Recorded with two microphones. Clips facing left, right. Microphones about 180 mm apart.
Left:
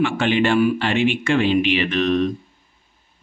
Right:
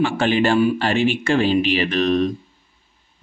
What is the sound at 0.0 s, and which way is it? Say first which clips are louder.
Speech: right 1 dB; 35° right (ahead or behind).